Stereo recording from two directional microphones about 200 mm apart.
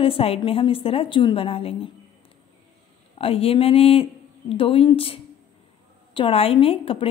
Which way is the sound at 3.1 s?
30° left (ahead or behind).